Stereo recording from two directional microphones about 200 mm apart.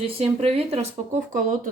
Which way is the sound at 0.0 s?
30° right (ahead or behind).